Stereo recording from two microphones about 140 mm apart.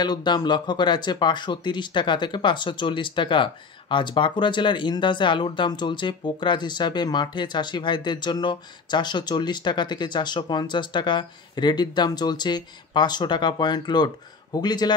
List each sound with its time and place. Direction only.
0.0 s speech: 30° left (ahead or behind)